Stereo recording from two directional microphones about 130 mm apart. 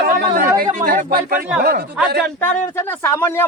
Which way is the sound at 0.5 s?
90° right.